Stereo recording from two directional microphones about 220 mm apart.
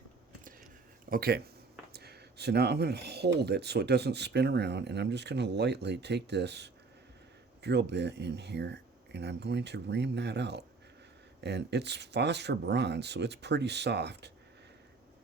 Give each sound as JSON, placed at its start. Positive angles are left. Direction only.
{"t": 1.1, "sound": "speech", "side_deg": -45}